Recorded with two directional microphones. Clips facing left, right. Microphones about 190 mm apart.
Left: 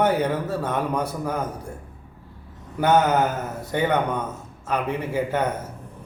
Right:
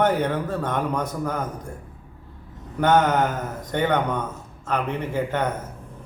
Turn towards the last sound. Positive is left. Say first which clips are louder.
# left 1 dB
turn(degrees=10)  # may be behind; listen again after turning